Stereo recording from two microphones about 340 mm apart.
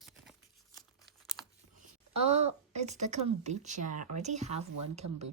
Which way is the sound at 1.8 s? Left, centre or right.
Centre.